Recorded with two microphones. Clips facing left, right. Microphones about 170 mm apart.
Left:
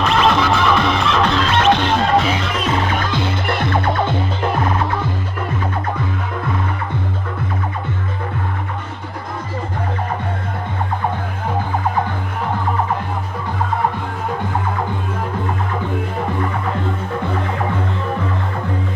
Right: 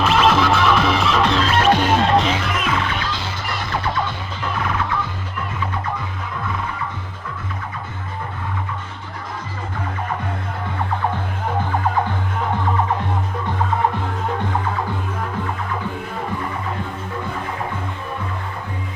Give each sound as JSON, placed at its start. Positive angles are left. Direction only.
{"t": 0.0, "sound": "music", "side_deg": 0}
{"t": 2.0, "sound": "music", "side_deg": 0}
{"t": 2.5, "sound": "music", "side_deg": 35}
{"t": 2.9, "sound": "music", "side_deg": 50}